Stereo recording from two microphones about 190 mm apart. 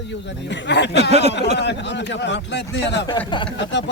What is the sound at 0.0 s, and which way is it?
Speech, 70° left (ahead or behind).